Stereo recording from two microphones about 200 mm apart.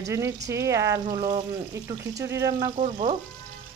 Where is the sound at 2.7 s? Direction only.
30° right (ahead or behind).